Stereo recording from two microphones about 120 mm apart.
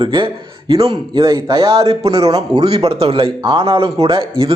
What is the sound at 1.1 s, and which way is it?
Speech, 30° right (ahead or behind).